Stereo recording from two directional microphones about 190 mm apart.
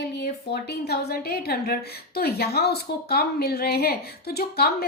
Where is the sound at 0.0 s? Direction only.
60° left (ahead or behind).